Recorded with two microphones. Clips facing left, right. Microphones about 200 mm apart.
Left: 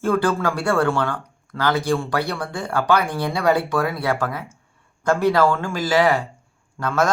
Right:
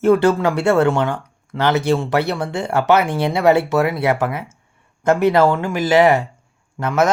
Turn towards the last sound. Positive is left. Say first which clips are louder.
# right 3 dB
turn(degrees=-20)  # may be behind; listen again after turning